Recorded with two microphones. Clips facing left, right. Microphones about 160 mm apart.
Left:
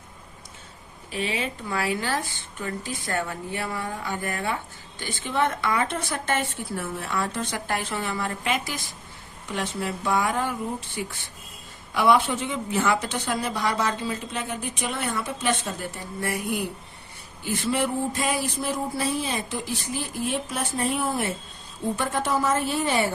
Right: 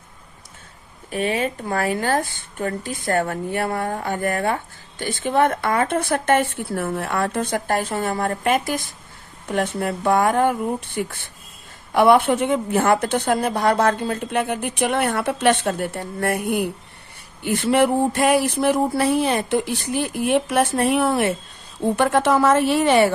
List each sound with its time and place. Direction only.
1.1 s a woman's voice: 50° right (ahead or behind); by 23.0 s 75° right (ahead or behind)